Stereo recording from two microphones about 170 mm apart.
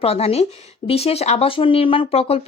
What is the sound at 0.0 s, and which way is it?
Speech, 35° left (ahead or behind).